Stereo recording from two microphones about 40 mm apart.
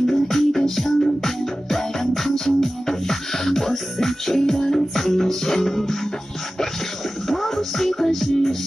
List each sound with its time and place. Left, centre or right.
0.0 s music: centre
7.2 s music: centre